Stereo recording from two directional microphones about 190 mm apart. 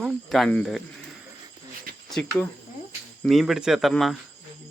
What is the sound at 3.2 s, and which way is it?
Speech, centre (ahead or behind).